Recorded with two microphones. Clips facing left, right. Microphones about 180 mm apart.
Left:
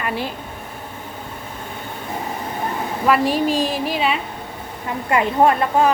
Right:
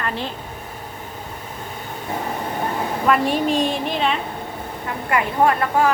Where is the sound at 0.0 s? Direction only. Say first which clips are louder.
Left 2 dB; 10° left (ahead or behind).